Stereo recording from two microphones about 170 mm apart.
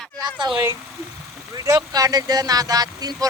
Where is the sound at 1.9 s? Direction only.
20° right (ahead or behind).